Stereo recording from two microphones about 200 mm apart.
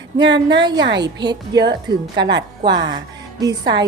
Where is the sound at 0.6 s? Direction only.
20° right (ahead or behind).